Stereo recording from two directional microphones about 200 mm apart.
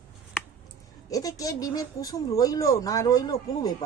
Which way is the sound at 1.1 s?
15° left (ahead or behind).